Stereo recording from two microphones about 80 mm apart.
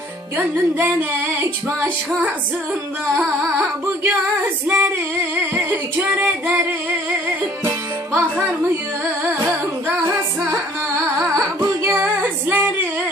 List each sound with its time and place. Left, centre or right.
0.7 s music: right
4.0 s music: right
7.6 s music: right
11.1 s music: right